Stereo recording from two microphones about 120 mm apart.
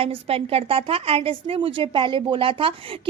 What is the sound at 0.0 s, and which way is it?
A woman's voice, 55° right (ahead or behind).